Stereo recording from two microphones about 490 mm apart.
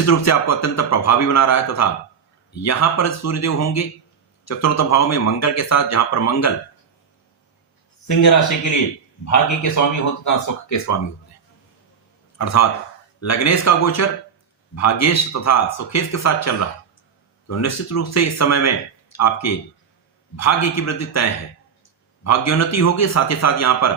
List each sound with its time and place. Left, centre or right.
0.0 s speech: left
8.0 s speech: left
12.4 s speech: left